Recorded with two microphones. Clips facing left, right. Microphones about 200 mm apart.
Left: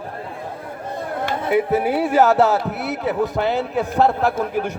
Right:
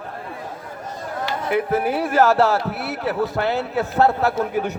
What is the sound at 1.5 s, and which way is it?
Speech, 20° left (ahead or behind).